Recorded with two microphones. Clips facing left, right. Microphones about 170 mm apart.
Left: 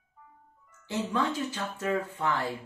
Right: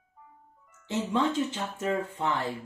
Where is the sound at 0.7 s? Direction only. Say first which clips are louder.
Right 1 dB; 20° right (ahead or behind).